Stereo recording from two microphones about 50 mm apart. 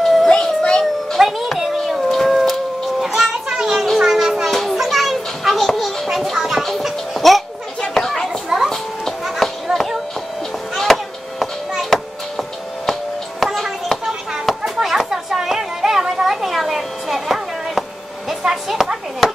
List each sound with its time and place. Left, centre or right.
0.0 s music: centre
0.3 s music: centre
1.1 s music: centre
2.0 s a sound: centre
4.0 s children playing: centre
7.8 s chatter: centre
8.6 s children playing: centre
9.8 s a sound: centre
10.8 s chop: centre
13.4 s children playing: centre
18.4 s a sound: centre